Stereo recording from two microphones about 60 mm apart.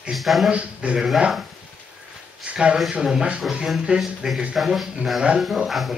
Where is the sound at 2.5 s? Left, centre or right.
Centre.